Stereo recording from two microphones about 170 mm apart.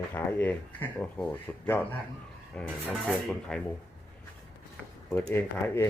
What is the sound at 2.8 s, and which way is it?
Speech, 5° right (ahead or behind).